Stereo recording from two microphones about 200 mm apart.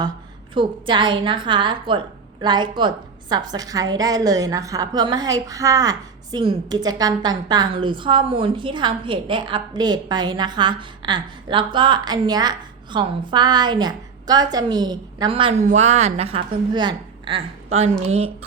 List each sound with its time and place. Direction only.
0.5 s a woman's voice: 25° right (ahead or behind)